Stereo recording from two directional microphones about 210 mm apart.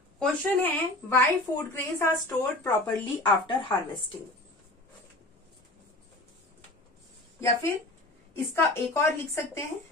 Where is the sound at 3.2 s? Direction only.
20° left (ahead or behind).